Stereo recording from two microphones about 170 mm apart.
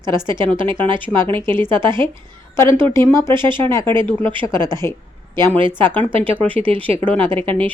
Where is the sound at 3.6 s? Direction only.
15° left (ahead or behind).